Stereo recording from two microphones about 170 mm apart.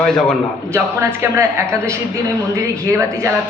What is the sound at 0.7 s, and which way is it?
A woman's voice, 15° right (ahead or behind).